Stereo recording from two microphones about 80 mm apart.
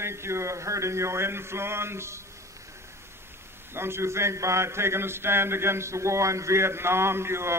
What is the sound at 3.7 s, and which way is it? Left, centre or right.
Mantra, right.